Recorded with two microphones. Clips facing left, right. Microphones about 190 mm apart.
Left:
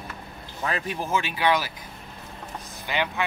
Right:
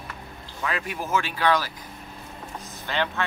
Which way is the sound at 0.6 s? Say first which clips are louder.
Left 1 dB; 30° left (ahead or behind).